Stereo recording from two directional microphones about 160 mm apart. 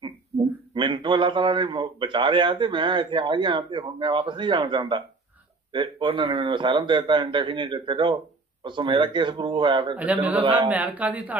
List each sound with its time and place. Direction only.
0.7 s a man's voice: 30° right (ahead or behind)
9.9 s speech: 10° right (ahead or behind)